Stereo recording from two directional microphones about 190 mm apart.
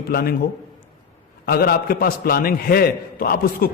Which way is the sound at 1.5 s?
55° left (ahead or behind).